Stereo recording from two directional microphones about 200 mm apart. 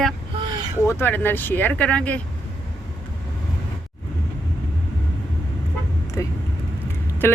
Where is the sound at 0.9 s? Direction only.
10° left (ahead or behind).